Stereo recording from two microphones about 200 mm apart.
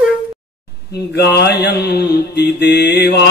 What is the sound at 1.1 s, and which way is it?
Mantra, 55° left (ahead or behind).